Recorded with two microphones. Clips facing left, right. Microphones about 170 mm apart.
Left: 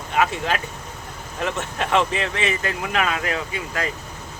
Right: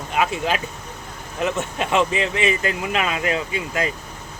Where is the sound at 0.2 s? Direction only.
15° right (ahead or behind).